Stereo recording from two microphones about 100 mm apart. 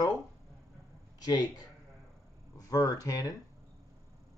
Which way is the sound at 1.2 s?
40° left (ahead or behind).